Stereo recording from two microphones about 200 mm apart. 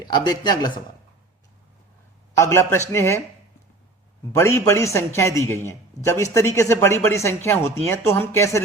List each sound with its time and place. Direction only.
0.0 s speech: 20° left (ahead or behind)
2.3 s speech: 15° left (ahead or behind)
4.4 s speech: 15° left (ahead or behind)